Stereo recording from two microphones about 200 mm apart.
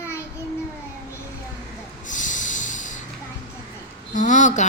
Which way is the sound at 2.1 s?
40° left (ahead or behind).